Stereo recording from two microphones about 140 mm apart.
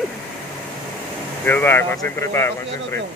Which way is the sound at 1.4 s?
15° left (ahead or behind).